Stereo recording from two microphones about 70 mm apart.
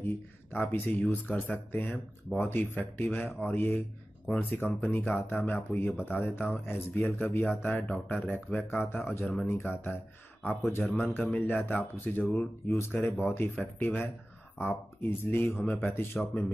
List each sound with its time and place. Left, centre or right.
0.0 s speech: left
8.6 s speech: left
9.2 s speech: centre
9.5 s speech: left
12.6 s speech: left